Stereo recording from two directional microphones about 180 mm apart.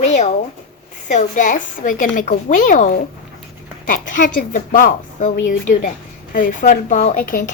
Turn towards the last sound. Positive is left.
turn(degrees=45)  # may be behind; listen again after turning